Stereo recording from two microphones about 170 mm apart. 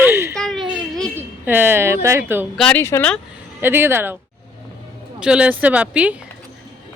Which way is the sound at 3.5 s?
15° right (ahead or behind).